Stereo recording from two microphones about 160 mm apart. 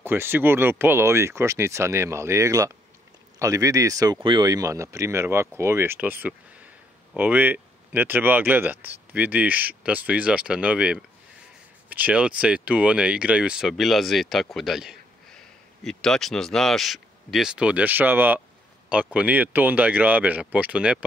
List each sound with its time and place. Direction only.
0.0 s speech: 15° right (ahead or behind)